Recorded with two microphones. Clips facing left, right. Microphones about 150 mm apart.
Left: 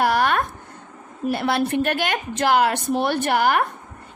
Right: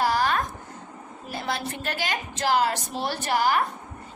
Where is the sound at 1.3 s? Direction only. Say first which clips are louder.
Left 9 dB; 65° left (ahead or behind).